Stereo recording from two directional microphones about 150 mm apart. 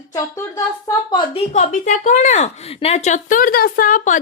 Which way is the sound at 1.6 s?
55° left (ahead or behind).